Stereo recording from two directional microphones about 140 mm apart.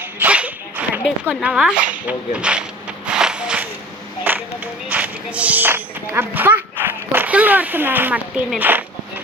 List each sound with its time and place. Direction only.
0.2 s speech: 10° right (ahead or behind)
3.1 s a sound: 5° right (ahead or behind)
4.2 s clapping: 15° right (ahead or behind)
4.9 s music: 10° right (ahead or behind)
8.4 s speech: 10° right (ahead or behind)